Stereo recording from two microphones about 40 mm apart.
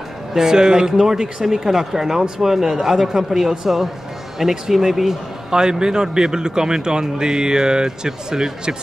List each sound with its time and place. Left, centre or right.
0.3 s a man's voice: centre